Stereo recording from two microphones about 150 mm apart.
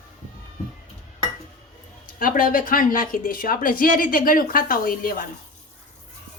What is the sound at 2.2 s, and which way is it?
Speech, 70° left (ahead or behind).